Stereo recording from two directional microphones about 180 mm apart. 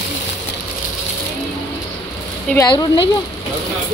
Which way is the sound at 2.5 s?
25° left (ahead or behind).